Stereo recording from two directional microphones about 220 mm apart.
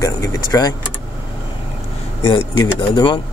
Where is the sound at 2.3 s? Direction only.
20° left (ahead or behind).